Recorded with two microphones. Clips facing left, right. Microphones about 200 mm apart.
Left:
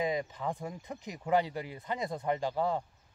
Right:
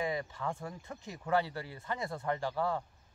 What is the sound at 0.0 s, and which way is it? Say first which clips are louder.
Speech: left 3 dB; 20° left (ahead or behind).